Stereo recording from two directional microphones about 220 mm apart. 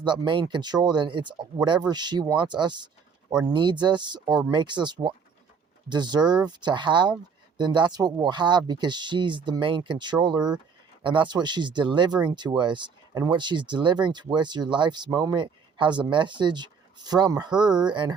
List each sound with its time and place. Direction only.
0.0 s speech: 20° right (ahead or behind)